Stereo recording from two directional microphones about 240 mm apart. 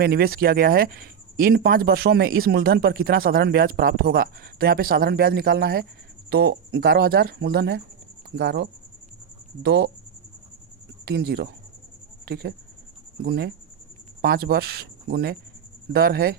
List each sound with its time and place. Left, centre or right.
0.0 s speech: right
11.0 s speech: right